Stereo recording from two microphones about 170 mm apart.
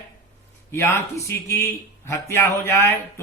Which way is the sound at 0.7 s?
15° left (ahead or behind).